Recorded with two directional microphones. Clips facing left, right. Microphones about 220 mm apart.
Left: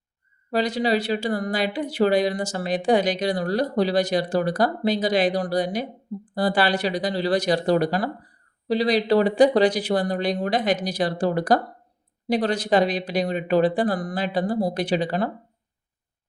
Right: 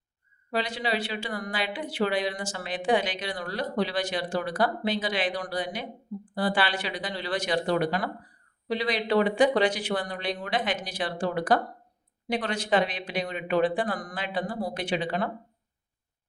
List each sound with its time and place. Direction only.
0.5 s speech: 40° left (ahead or behind)